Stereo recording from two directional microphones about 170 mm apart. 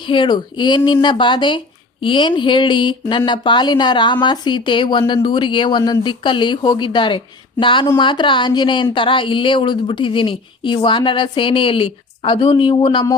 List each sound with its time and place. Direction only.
0.1 s speech: 25° left (ahead or behind)